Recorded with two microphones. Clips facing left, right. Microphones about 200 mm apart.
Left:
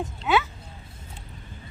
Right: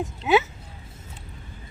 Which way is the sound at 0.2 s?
20° right (ahead or behind).